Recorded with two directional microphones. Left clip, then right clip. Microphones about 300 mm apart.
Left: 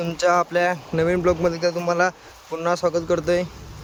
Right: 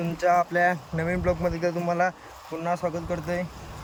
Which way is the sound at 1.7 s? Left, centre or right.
Centre.